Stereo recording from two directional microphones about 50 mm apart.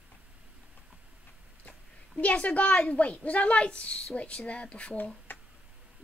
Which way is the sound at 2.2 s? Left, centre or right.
Left.